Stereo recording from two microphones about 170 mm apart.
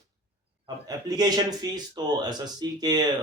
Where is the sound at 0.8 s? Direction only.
20° right (ahead or behind).